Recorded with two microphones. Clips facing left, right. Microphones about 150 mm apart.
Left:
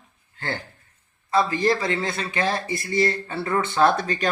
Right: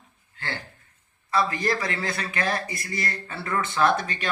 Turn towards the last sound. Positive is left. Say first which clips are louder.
# left 3 dB
turn(degrees=35)  # may be behind; listen again after turning